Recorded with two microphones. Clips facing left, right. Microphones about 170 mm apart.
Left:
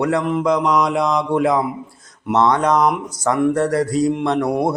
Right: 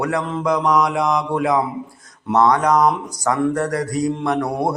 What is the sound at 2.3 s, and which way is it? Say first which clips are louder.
Mantra: even; 25° left (ahead or behind).